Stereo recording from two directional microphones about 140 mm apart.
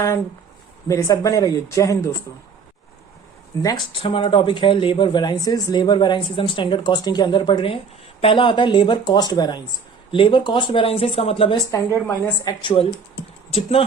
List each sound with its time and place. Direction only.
0.9 s a woman's voice: 20° left (ahead or behind)
3.9 s speech: 40° left (ahead or behind)
11.5 s a woman's voice: 20° left (ahead or behind)
12.6 s speech: 40° left (ahead or behind)